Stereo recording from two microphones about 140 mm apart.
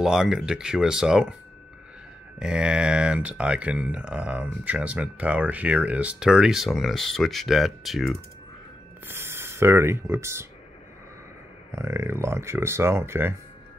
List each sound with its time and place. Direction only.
0.0 s speech: 5° right (ahead or behind)
2.3 s speech: 5° right (ahead or behind)
9.0 s speech: 15° right (ahead or behind)
11.7 s speech: 20° right (ahead or behind)